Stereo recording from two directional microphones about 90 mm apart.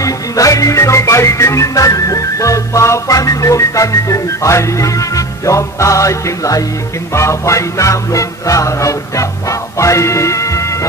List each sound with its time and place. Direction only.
0.0 s music: 40° left (ahead or behind)